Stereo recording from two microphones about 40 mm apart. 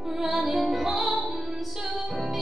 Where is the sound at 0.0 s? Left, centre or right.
Centre.